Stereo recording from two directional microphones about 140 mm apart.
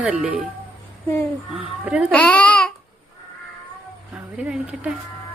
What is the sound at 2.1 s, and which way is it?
Babbling, 10° left (ahead or behind).